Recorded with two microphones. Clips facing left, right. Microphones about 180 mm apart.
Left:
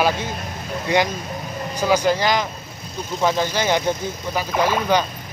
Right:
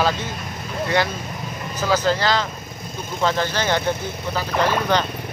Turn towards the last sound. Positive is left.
turn(degrees=10)  # may be behind; listen again after turning